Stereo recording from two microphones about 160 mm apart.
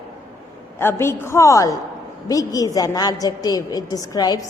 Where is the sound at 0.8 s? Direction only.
15° left (ahead or behind).